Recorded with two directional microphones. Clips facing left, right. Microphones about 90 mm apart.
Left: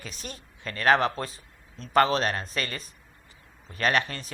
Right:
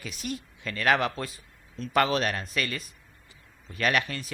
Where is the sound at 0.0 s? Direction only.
35° left (ahead or behind).